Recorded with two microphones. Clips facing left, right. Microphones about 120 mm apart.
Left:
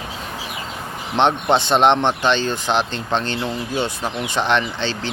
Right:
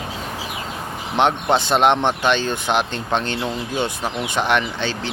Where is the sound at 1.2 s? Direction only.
10° right (ahead or behind).